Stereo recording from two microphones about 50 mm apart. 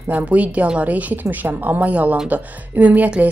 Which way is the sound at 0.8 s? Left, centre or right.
Right.